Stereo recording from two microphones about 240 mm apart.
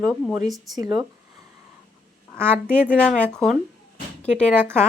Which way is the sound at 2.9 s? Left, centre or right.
Centre.